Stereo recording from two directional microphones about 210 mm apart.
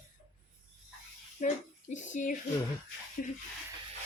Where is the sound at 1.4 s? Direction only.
40° left (ahead or behind).